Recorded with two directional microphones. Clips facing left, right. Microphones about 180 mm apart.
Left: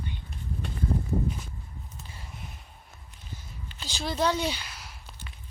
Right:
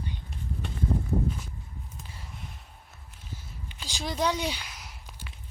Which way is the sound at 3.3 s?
10° right (ahead or behind).